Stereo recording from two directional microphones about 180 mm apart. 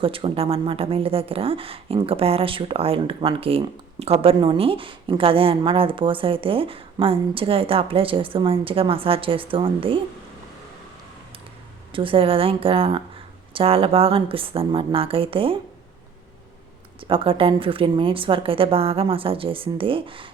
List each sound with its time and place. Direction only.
0.0 s a woman's voice: 30° right (ahead or behind)
11.9 s a woman's voice: 30° right (ahead or behind)
17.1 s a woman's voice: 30° right (ahead or behind)